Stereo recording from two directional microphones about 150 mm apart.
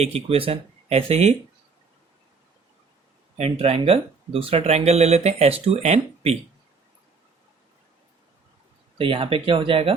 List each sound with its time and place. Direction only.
0.0 s speech: 40° right (ahead or behind)
3.3 s speech: 45° right (ahead or behind)
9.0 s speech: 35° right (ahead or behind)